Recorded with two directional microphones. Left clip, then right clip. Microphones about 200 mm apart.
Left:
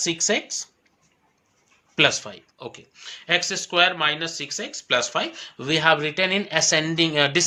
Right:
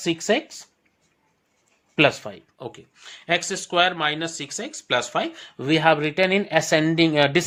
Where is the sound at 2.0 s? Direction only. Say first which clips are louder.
Even; 35° right (ahead or behind).